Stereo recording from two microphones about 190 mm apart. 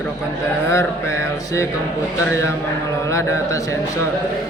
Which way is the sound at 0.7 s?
15° left (ahead or behind).